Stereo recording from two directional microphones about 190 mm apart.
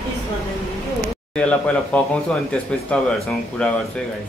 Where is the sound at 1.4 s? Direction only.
5° left (ahead or behind).